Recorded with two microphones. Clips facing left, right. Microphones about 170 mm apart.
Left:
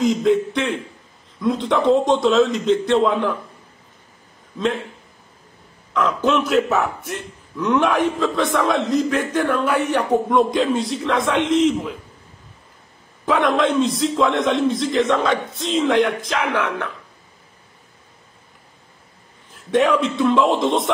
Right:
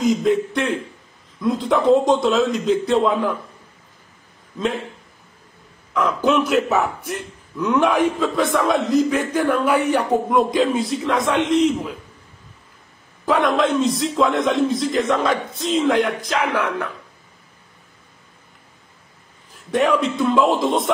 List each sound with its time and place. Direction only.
0.0 s a man's voice: centre (ahead or behind)
5.9 s a man's voice: centre (ahead or behind)
13.2 s a man's voice: centre (ahead or behind)
19.5 s a man's voice: centre (ahead or behind)